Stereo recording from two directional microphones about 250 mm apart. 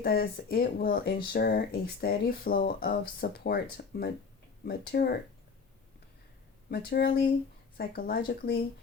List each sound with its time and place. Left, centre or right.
0.0 s speech: left
6.7 s speech: left